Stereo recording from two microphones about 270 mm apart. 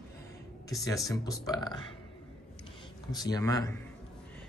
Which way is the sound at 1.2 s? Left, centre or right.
Centre.